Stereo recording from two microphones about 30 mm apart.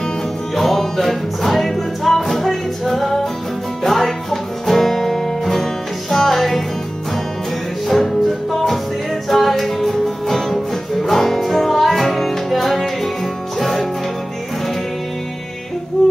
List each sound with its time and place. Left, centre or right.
0.6 s music: centre
7.9 s music: centre
16.0 s a sound: centre